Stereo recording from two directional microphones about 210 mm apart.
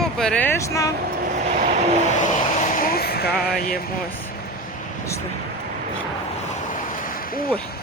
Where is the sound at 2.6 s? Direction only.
40° left (ahead or behind).